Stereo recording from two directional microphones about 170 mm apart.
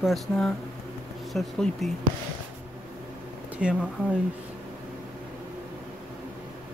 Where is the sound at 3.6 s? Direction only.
5° right (ahead or behind).